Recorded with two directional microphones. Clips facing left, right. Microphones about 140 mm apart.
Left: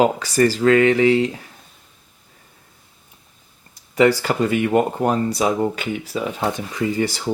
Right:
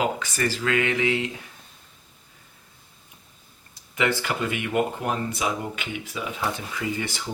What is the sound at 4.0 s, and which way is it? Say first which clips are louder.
Speech: left 9 dB; 35° left (ahead or behind).